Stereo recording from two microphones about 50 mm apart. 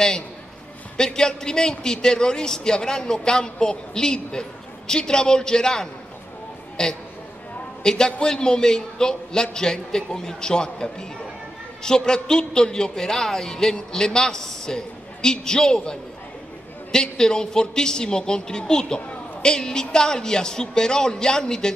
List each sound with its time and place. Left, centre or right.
0.9 s a man's voice: centre